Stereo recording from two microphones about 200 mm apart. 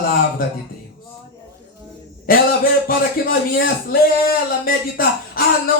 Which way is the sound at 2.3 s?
45° left (ahead or behind).